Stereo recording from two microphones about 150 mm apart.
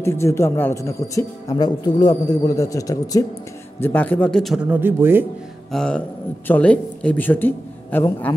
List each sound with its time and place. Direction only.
0.0 s speech: 15° left (ahead or behind)
3.8 s speech: 10° left (ahead or behind)
4.6 s speech: 15° right (ahead or behind)
5.7 s speech: 5° left (ahead or behind)